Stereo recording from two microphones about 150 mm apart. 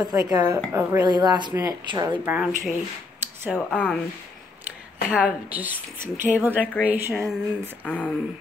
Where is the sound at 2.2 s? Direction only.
10° right (ahead or behind).